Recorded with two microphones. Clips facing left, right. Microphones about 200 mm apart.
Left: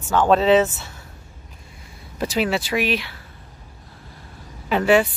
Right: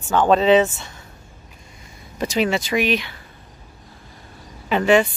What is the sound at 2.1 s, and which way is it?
Speech, 5° left (ahead or behind).